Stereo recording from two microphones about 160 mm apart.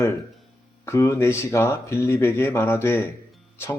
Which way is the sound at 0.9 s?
20° left (ahead or behind).